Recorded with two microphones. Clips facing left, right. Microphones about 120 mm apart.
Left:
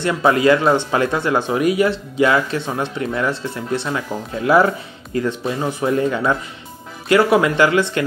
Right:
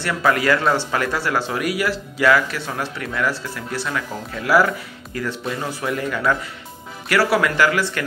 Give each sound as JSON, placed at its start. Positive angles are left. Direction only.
{"t": 0.0, "sound": "speech", "side_deg": 20}